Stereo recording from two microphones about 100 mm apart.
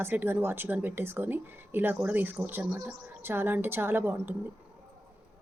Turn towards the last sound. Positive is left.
turn(degrees=-20)  # may be behind; listen again after turning